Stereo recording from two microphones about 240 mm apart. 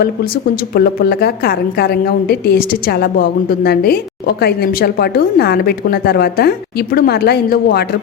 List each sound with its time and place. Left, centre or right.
0.7 s a woman's voice: left